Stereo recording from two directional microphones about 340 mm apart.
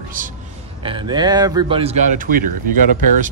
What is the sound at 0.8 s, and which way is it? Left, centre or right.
Speech, centre.